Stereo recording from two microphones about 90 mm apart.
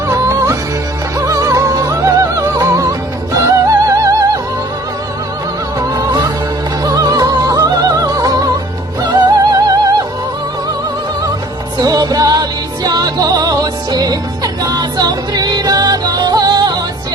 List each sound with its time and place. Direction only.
0.1 s music: 35° right (ahead or behind)
5.9 s music: 50° right (ahead or behind)
11.8 s music: 50° right (ahead or behind)